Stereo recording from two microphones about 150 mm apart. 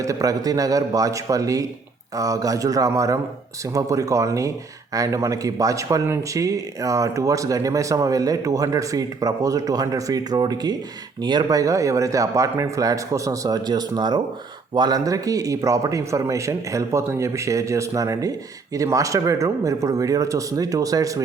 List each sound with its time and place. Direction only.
0.0 s a man's voice: 20° right (ahead or behind)